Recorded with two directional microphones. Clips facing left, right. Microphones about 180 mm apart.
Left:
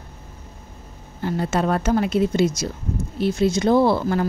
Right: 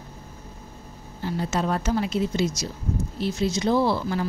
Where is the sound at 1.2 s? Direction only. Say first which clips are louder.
Left 4 dB; 55° left (ahead or behind).